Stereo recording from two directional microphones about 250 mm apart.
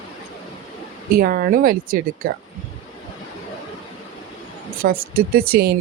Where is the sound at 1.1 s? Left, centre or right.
Right.